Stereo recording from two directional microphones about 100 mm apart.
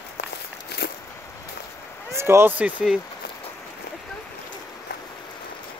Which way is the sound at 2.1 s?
25° right (ahead or behind).